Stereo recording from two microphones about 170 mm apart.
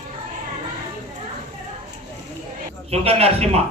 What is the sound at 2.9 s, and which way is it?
Speech, 35° right (ahead or behind).